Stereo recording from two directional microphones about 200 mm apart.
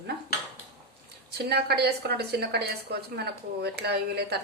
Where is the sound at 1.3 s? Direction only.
55° right (ahead or behind).